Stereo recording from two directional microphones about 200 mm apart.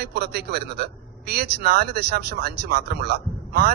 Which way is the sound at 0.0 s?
55° right (ahead or behind).